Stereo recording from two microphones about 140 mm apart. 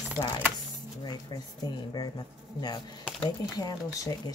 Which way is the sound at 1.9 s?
30° left (ahead or behind).